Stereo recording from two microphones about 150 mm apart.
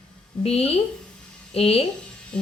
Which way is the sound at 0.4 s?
40° left (ahead or behind).